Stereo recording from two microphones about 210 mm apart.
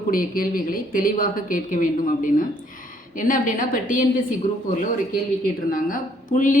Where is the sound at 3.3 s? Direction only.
40° left (ahead or behind).